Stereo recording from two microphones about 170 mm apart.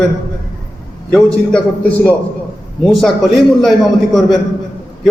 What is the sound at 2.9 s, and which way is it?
Speech, centre (ahead or behind).